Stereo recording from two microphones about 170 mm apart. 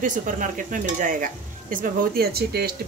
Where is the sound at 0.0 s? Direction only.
50° right (ahead or behind).